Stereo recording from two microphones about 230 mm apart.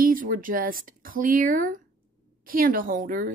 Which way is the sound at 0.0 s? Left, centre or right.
Right.